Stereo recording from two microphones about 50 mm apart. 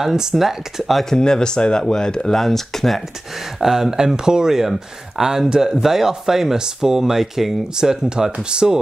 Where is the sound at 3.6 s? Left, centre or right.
Centre.